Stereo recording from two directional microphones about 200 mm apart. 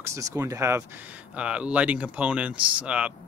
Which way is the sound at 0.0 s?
15° right (ahead or behind).